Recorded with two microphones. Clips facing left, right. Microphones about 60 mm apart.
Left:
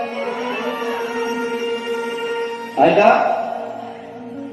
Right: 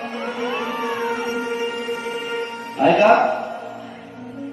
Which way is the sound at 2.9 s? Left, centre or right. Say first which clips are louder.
Even; left.